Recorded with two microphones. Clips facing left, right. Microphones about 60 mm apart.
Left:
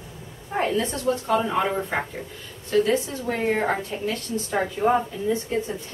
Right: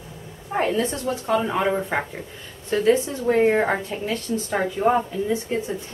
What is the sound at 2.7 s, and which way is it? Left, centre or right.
Speech, right.